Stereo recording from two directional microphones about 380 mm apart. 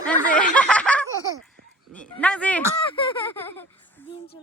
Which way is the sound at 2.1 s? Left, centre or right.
Centre.